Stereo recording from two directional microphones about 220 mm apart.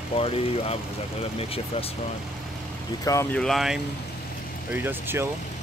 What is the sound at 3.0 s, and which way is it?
Speech, 15° left (ahead or behind).